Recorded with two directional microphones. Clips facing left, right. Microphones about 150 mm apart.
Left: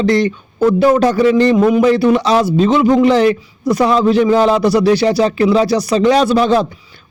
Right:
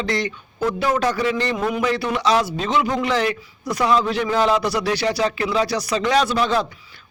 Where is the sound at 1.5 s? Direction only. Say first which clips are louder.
Left 11 dB; 25° left (ahead or behind).